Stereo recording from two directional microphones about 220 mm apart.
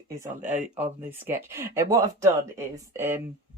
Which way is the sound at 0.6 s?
5° right (ahead or behind).